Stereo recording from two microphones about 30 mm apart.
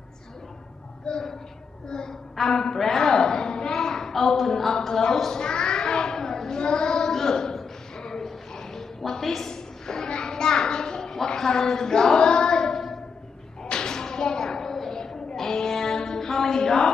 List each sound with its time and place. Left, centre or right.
1.0 s a woman's voice: left
5.4 s child singing: left
7.1 s a sound: centre
9.1 s a woman's voice: centre
9.5 s a sound: left
15.3 s music: centre